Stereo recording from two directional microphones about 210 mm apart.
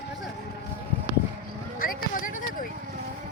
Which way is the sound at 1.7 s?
40° left (ahead or behind).